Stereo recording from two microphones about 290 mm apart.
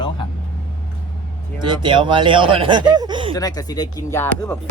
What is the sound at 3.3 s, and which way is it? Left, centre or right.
Speech, centre.